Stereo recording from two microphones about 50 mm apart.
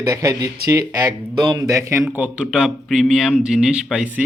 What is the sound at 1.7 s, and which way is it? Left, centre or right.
Speech, right.